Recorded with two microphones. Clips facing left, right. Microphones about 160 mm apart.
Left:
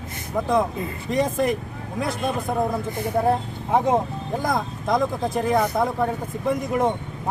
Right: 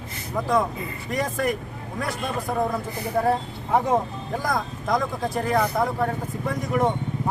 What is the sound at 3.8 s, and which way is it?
Speech, 20° left (ahead or behind).